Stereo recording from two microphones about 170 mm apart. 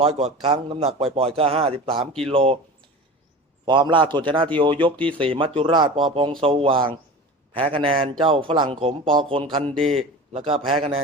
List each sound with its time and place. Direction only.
0.0 s a man's voice: 35° right (ahead or behind)
3.7 s a man's voice: 30° right (ahead or behind)
9.6 s a man's voice: 5° left (ahead or behind)
10.3 s a man's voice: 35° right (ahead or behind)